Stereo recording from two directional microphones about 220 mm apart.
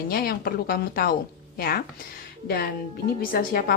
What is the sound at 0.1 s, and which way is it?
Speech, 40° left (ahead or behind).